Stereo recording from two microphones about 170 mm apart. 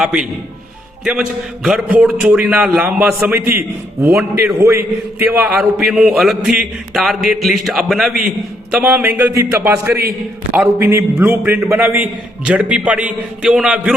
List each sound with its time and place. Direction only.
0.0 s a man's voice: 5° right (ahead or behind)
5.5 s a man's voice: 5° right (ahead or behind)